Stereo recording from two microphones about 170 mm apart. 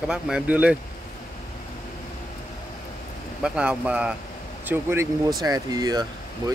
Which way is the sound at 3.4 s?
5° right (ahead or behind).